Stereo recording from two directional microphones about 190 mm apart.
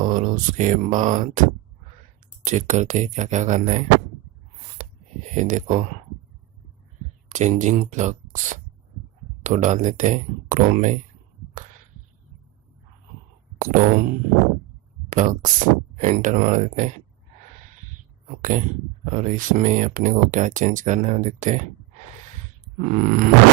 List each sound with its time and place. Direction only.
0.0 s speech: 40° right (ahead or behind)
4.8 s a sound: 45° right (ahead or behind)
5.3 s speech: 40° right (ahead or behind)
7.3 s speech: 40° right (ahead or behind)
13.6 s speech: 45° right (ahead or behind)
19.0 s speech: 40° right (ahead or behind)
22.9 s speech: 45° right (ahead or behind)